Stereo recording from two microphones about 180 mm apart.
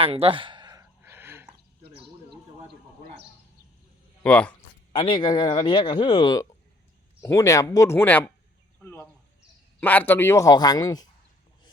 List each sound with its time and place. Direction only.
0.0 s a sound: 30° right (ahead or behind); by 1.5 s 10° right (ahead or behind)
4.2 s speech: 5° left (ahead or behind)
4.9 s a man's voice: 30° left (ahead or behind)